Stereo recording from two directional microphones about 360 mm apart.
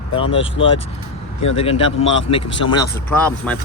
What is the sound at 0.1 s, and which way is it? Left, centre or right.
Speech, centre.